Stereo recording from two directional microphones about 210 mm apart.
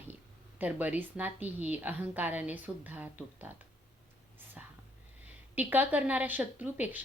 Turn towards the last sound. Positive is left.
turn(degrees=-10)  # may be behind; listen again after turning